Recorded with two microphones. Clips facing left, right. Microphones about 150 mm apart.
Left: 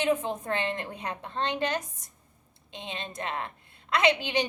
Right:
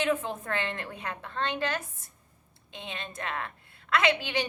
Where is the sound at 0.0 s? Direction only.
20° left (ahead or behind).